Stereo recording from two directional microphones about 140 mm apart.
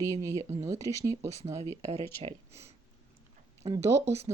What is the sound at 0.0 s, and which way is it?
Speech, 25° right (ahead or behind).